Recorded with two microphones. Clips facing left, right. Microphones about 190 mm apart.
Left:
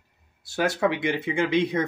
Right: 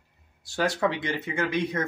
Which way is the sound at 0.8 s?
15° left (ahead or behind).